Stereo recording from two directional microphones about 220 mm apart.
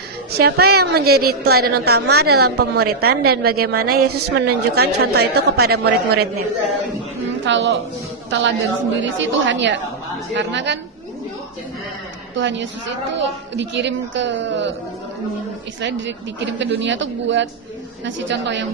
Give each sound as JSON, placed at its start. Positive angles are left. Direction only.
{"t": 0.3, "sound": "a woman's voice", "side_deg": -45}
{"t": 7.4, "sound": "a man's voice", "side_deg": -55}
{"t": 12.4, "sound": "a woman's voice", "side_deg": -55}
{"t": 15.8, "sound": "a woman's voice", "side_deg": -55}